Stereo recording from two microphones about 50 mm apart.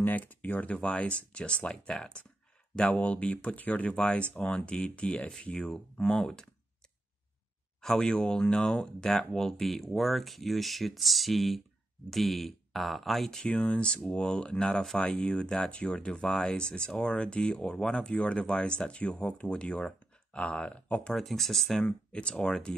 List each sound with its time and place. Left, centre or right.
0.0 s speech: left; by 6.4 s centre
7.8 s speech: centre
13.6 s speech: centre
21.1 s speech: centre
22.2 s speech: centre